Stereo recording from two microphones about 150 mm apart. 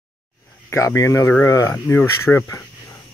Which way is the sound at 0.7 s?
20° left (ahead or behind).